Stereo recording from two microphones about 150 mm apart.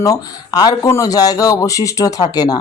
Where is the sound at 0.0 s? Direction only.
25° left (ahead or behind).